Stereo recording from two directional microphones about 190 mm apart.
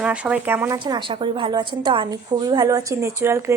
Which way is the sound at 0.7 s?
25° right (ahead or behind).